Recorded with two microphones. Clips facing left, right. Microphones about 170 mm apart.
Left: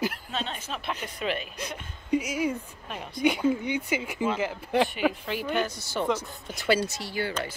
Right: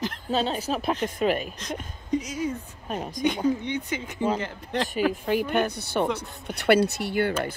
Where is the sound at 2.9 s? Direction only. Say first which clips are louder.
Right 6 dB; 40° right (ahead or behind).